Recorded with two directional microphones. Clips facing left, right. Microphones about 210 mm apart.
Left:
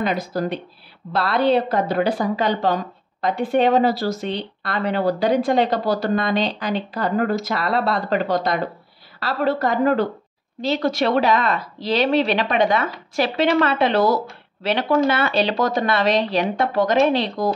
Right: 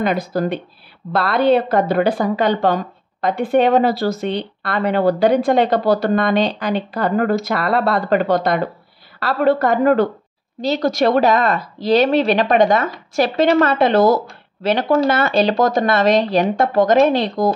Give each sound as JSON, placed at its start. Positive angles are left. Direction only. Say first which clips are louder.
{"t": 0.0, "sound": "speech", "louder": "right 4 dB", "side_deg": -55}
{"t": 10.6, "sound": "a woman's voice", "louder": "right 3 dB", "side_deg": -40}